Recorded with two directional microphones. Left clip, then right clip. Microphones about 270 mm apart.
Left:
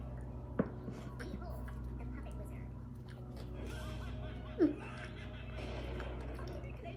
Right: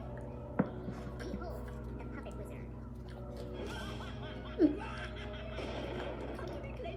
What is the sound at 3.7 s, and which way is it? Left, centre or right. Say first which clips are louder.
Music: right 5 dB; right.